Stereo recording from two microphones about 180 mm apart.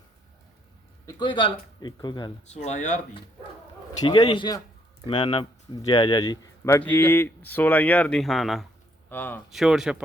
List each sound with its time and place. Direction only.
1.0 s a man's voice: 25° left (ahead or behind)
2.5 s speech: 40° left (ahead or behind)
4.0 s a man's voice: 25° left (ahead or behind); by 8.6 s centre (ahead or behind)
9.0 s speech: 10° left (ahead or behind)
9.5 s speech: centre (ahead or behind)